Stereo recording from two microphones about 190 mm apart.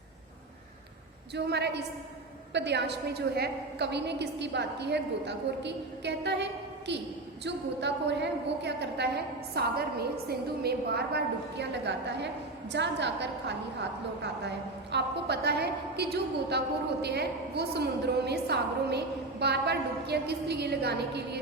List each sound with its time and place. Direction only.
1.5 s a woman's voice: 60° right (ahead or behind)
14.9 s a woman's voice: 60° right (ahead or behind)